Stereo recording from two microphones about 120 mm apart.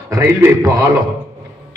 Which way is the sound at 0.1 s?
30° right (ahead or behind).